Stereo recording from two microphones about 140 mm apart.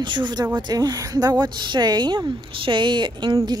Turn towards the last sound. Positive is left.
turn(degrees=-30)  # may be behind; listen again after turning